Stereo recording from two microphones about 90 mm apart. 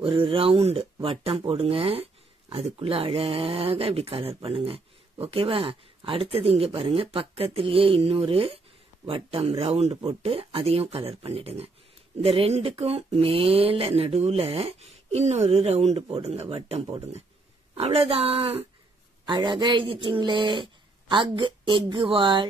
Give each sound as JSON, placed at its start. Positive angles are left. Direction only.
{"t": 0.0, "sound": "speech", "side_deg": -85}
{"t": 16.0, "sound": "speech", "side_deg": -90}
{"t": 19.2, "sound": "speech", "side_deg": -65}